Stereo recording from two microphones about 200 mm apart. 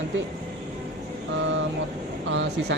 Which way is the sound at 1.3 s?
70° right (ahead or behind).